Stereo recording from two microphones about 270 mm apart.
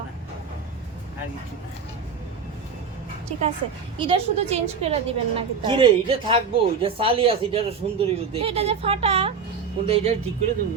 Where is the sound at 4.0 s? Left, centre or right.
Right.